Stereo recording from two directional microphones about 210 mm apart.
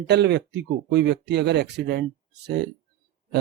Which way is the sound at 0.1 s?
55° right (ahead or behind).